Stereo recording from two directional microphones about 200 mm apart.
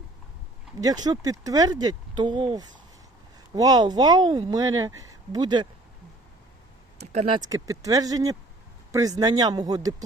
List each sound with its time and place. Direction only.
0.8 s speech: 20° right (ahead or behind)
7.0 s a sound: 35° right (ahead or behind)
7.3 s speech: 20° right (ahead or behind)